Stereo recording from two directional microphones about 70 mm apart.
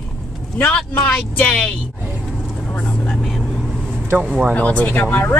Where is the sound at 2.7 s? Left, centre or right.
Centre.